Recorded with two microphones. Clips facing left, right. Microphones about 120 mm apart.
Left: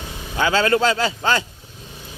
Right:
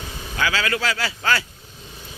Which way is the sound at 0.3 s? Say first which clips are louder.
Left 6 dB; 25° left (ahead or behind).